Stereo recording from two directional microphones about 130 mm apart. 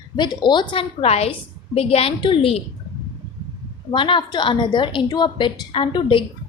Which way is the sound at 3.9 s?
40° left (ahead or behind).